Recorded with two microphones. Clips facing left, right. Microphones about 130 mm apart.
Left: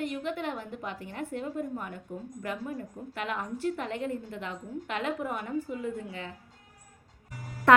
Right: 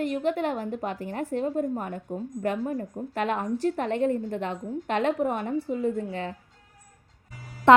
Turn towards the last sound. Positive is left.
turn(degrees=-25)  # may be behind; listen again after turning